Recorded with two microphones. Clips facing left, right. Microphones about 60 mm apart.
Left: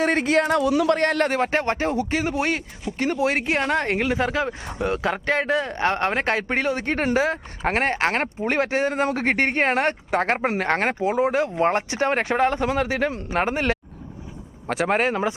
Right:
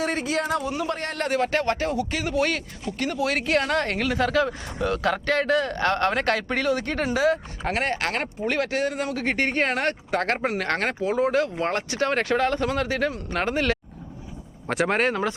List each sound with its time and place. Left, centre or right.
0.0 s speech: left
0.9 s a man's voice: left
1.3 s speech: left
14.7 s speech: centre